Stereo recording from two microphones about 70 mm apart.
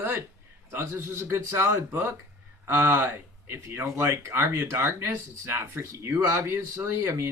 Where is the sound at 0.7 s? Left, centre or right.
Right.